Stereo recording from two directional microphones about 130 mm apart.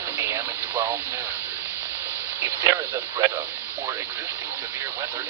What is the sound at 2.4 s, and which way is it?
Speech, 20° right (ahead or behind).